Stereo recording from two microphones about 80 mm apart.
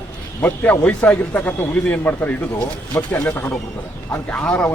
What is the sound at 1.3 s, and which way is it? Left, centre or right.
Speech, left.